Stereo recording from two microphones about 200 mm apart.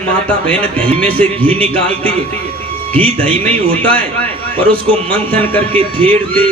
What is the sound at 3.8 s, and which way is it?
Speech, 5° left (ahead or behind).